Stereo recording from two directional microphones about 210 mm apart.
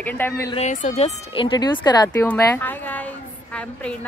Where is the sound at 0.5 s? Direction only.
35° left (ahead or behind).